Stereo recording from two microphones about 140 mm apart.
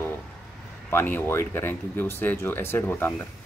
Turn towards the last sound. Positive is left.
turn(degrees=15)  # may be behind; listen again after turning